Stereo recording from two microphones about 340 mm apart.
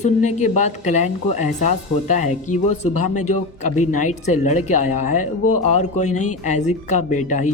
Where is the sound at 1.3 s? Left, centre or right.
Left.